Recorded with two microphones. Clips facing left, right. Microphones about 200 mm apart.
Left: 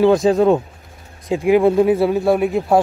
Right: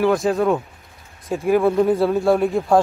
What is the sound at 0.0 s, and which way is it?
Speech, 20° left (ahead or behind).